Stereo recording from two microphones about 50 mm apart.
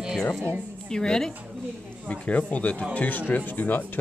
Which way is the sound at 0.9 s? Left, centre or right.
Centre.